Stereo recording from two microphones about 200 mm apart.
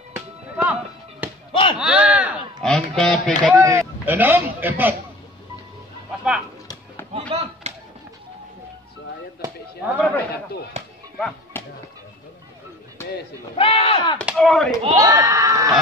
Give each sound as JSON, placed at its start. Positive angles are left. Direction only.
{"t": 0.1, "sound": "music", "side_deg": -10}
{"t": 1.5, "sound": "chop", "side_deg": 25}
{"t": 1.8, "sound": "speech", "side_deg": -5}
{"t": 3.5, "sound": "speech", "side_deg": -15}
{"t": 7.2, "sound": "a sound", "side_deg": -35}
{"t": 9.8, "sound": "speech", "side_deg": -10}
{"t": 11.1, "sound": "music", "side_deg": 0}
{"t": 13.6, "sound": "speech", "side_deg": 25}
{"t": 14.2, "sound": "speech", "side_deg": 0}
{"t": 14.8, "sound": "speech", "side_deg": -25}